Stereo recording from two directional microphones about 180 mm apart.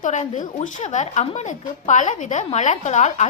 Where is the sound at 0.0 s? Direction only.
40° left (ahead or behind).